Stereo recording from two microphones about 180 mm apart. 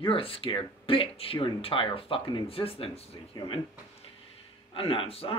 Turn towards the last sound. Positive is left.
turn(degrees=30)  # may be behind; listen again after turning